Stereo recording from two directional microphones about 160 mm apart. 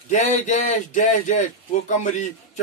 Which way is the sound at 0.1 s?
50° left (ahead or behind).